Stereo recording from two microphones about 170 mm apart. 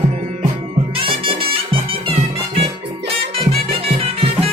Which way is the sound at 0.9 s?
30° right (ahead or behind).